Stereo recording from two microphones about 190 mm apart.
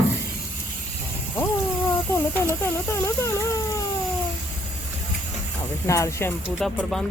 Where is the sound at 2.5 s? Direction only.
15° left (ahead or behind).